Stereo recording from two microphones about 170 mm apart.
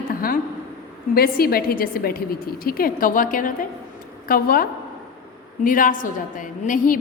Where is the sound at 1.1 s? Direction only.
65° left (ahead or behind).